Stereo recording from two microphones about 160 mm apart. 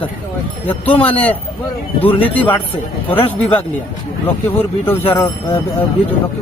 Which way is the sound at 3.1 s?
35° left (ahead or behind).